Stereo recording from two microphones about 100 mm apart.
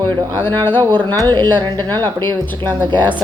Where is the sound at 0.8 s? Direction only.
45° right (ahead or behind).